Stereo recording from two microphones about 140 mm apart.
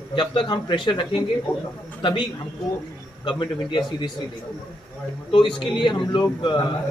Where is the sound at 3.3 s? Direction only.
35° left (ahead or behind).